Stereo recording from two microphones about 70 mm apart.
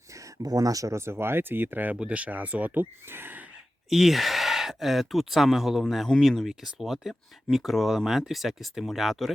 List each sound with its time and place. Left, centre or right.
0.4 s speech: right
3.8 s speech: centre